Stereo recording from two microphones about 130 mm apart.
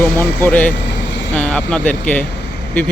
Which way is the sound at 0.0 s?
15° left (ahead or behind).